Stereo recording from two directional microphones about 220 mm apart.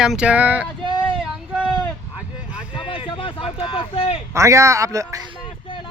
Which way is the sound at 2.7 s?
25° left (ahead or behind).